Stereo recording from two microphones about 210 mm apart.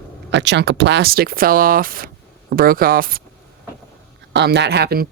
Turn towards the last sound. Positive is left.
turn(degrees=-50)  # may be behind; listen again after turning